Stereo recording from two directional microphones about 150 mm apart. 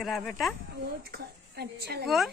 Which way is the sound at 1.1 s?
90° right.